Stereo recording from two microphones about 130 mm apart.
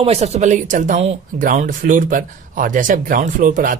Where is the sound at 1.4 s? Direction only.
90° right.